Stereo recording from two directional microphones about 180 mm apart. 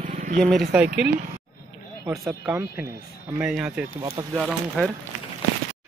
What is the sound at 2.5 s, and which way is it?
Speech, 10° right (ahead or behind).